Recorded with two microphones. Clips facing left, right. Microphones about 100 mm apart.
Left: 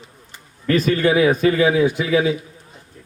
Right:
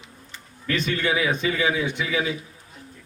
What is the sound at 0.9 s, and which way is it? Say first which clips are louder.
Speech: left 8 dB; 40° left (ahead or behind).